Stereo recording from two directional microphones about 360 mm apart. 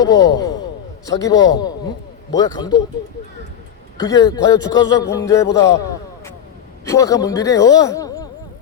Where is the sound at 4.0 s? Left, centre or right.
Centre.